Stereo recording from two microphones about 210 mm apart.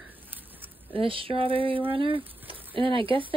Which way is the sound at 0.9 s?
25° right (ahead or behind).